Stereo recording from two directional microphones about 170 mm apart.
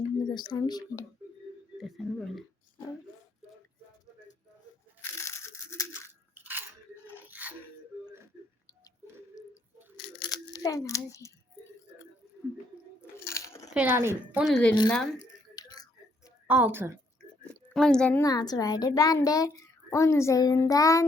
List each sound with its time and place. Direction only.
0.2 s speech: 25° left (ahead or behind)
1.8 s speech: centre (ahead or behind)
5.1 s ratchet: 15° left (ahead or behind)
6.3 s biting: 10° right (ahead or behind)
7.3 s a sound: 10° right (ahead or behind)
10.5 s a sound: 20° left (ahead or behind)
13.1 s a sound: 15° left (ahead or behind)
13.7 s a woman's voice: 15° right (ahead or behind)
14.4 s speech: 5° left (ahead or behind)
15.5 s whispering: 25° left (ahead or behind)
16.5 s a woman's voice: 10° right (ahead or behind)
17.7 s speech: 5° left (ahead or behind)
18.2 s a child's voice: 25° left (ahead or behind)